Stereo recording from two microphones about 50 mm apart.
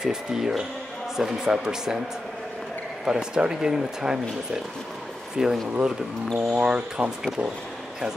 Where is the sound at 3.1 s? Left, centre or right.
Centre.